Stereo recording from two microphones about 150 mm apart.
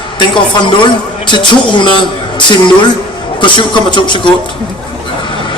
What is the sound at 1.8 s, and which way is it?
Speech, 30° left (ahead or behind).